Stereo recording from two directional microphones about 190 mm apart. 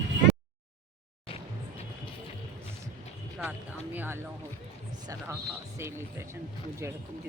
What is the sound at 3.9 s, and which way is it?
Speech, 10° right (ahead or behind).